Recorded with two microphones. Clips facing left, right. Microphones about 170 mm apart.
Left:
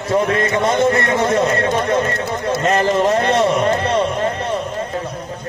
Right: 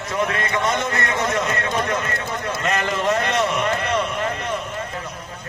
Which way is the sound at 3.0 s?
35° left (ahead or behind).